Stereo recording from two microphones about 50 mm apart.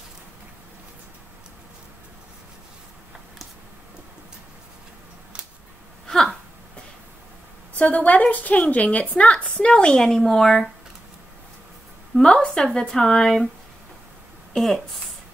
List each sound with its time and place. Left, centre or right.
6.0 s a sound: centre
7.8 s a woman's voice: left; by 10.7 s centre
12.2 s a woman's voice: centre
14.5 s speech: centre